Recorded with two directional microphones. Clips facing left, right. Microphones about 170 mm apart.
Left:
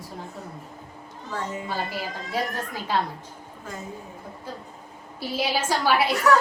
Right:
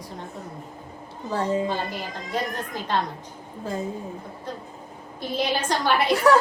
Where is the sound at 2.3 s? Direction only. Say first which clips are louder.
Even; 10° left (ahead or behind).